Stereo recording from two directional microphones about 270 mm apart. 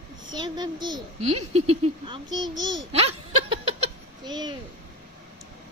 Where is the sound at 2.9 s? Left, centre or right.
Right.